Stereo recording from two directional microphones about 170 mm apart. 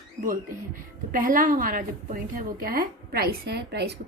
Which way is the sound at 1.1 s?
50° right (ahead or behind).